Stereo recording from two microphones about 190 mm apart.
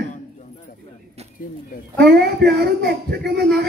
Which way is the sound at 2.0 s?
60° right (ahead or behind).